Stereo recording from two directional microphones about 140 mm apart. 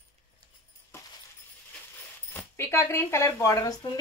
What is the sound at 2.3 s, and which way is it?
Speech, 15° left (ahead or behind).